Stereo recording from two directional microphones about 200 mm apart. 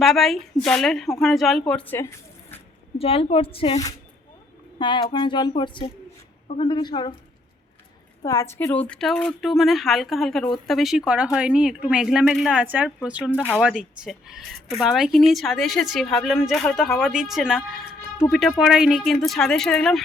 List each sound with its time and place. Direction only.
0.0 s speech: centre (ahead or behind)
3.0 s speech: 30° left (ahead or behind)
8.2 s speech: 15° left (ahead or behind); by 13.4 s 5° right (ahead or behind)
13.4 s speech: 5° left (ahead or behind)
13.7 s speech: 5° right (ahead or behind)